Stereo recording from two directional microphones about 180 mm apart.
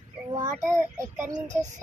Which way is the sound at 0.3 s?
20° right (ahead or behind).